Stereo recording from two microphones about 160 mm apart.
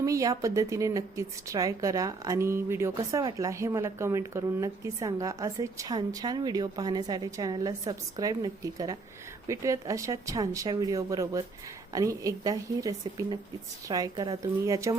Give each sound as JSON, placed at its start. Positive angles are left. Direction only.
{"t": 0.0, "sound": "a woman's voice", "side_deg": -20}